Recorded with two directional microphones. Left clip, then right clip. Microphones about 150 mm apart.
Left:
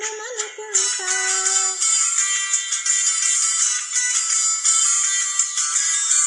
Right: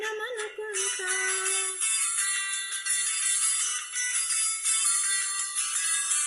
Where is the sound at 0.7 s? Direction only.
20° right (ahead or behind).